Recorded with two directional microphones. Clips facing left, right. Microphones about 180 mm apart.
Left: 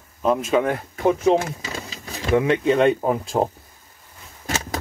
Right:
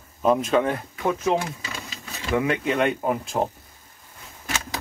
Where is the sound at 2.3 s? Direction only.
25° left (ahead or behind).